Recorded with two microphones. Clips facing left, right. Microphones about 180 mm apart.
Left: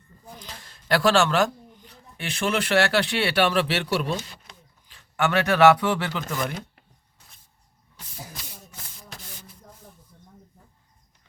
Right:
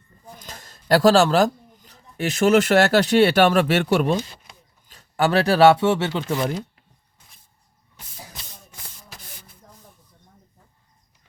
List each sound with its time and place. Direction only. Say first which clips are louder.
0.3 s speech: right 1 dB; 45° right (ahead or behind)
4.9 s speech: right 4 dB; 40° right (ahead or behind)